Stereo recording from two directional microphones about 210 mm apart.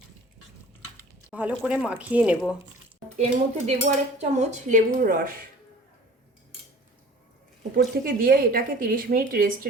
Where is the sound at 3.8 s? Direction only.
35° right (ahead or behind).